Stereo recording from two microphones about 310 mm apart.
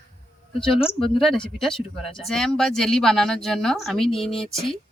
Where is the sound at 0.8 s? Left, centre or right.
Centre.